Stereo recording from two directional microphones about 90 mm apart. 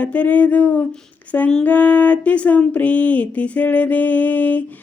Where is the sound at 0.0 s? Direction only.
15° left (ahead or behind).